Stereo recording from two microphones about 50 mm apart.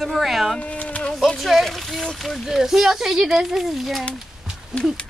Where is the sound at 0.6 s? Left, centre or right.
Left.